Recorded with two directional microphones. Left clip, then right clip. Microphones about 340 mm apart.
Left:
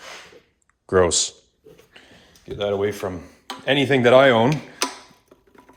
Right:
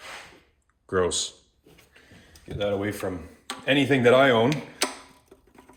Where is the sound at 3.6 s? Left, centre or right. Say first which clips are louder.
Left 3 dB; left.